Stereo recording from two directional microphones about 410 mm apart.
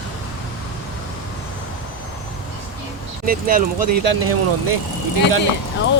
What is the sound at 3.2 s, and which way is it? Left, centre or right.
Speech, centre.